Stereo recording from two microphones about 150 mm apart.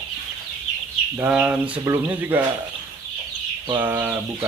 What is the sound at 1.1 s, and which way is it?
Speech, 10° right (ahead or behind).